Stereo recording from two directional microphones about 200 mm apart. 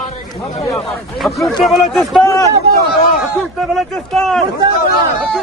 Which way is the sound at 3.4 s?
Centre (ahead or behind).